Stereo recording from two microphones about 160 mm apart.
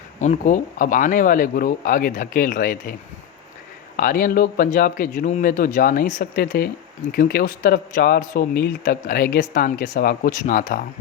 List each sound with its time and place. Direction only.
0.2 s speech: 50° left (ahead or behind)
3.9 s speech: 60° left (ahead or behind)